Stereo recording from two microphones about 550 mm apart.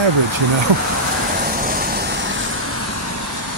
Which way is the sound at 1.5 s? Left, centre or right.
Centre.